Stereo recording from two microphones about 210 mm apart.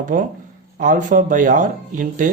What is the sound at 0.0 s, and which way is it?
Speech, 40° right (ahead or behind).